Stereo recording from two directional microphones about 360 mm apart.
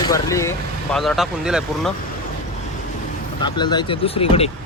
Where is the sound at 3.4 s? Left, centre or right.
Centre.